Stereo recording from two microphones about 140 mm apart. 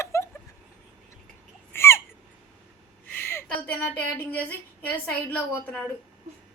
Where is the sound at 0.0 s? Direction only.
20° left (ahead or behind).